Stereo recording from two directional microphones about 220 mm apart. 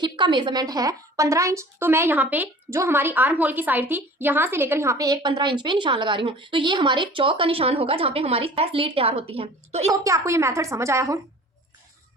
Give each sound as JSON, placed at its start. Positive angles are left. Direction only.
{"t": 0.0, "sound": "a woman's voice", "side_deg": -20}
{"t": 10.0, "sound": "a woman's voice", "side_deg": -15}